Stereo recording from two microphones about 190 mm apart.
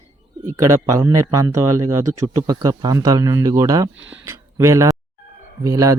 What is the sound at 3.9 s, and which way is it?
Speech, 80° right.